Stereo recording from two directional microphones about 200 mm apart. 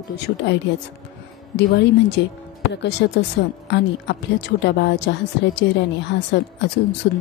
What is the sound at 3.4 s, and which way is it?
A woman's voice, 65° left (ahead or behind).